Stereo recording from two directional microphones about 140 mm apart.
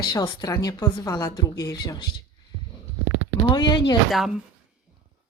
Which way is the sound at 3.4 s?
30° left (ahead or behind).